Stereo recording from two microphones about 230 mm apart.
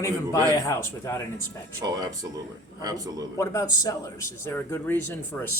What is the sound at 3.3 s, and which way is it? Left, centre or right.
Speech, centre.